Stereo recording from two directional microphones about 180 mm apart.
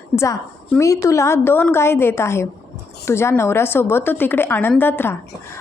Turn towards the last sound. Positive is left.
turn(degrees=10)  # may be behind; listen again after turning